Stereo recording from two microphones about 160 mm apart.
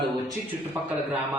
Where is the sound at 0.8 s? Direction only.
10° right (ahead or behind).